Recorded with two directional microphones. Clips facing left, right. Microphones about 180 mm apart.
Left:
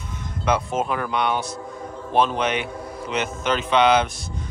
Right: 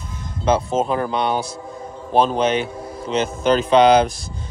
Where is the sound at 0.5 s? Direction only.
30° right (ahead or behind).